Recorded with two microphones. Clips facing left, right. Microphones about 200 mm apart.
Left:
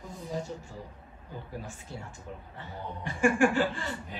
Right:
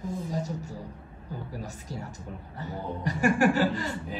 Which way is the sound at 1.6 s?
40° right (ahead or behind).